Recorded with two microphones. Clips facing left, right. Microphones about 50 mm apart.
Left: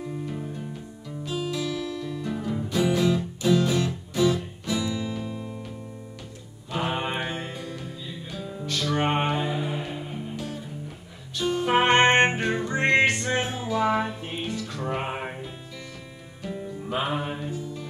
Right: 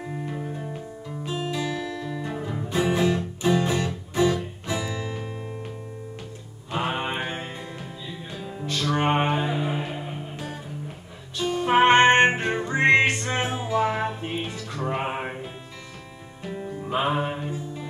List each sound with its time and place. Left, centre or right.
1.2 s music: right
6.7 s mantra: right
7.2 s music: right
11.7 s music: right
15.0 s music: centre
16.5 s music: right